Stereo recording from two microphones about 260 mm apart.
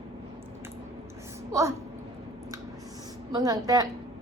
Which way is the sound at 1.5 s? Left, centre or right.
Centre.